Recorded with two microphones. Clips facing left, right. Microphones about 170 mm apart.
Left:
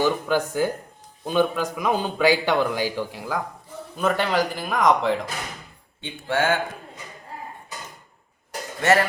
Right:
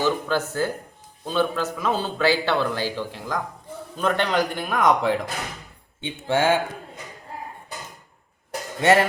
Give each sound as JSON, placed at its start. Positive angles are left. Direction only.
{"t": 0.0, "sound": "speech", "side_deg": 15}
{"t": 6.0, "sound": "speech", "side_deg": -20}
{"t": 8.8, "sound": "speech", "side_deg": -20}